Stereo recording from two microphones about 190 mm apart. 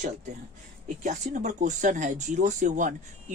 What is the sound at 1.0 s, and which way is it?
Speech, 40° right (ahead or behind).